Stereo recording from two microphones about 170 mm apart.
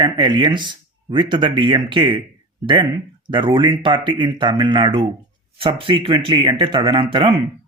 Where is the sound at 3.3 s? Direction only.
30° right (ahead or behind).